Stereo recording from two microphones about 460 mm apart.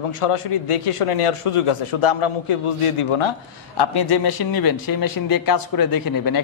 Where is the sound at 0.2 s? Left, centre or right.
Left.